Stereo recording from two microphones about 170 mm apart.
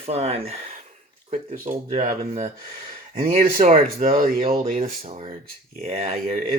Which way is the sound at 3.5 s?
45° right (ahead or behind).